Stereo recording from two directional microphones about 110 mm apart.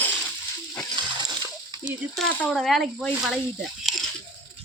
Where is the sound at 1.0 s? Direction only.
45° right (ahead or behind).